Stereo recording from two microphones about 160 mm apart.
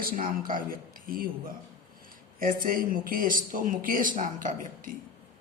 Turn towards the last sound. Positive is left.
turn(degrees=-55)  # may be behind; listen again after turning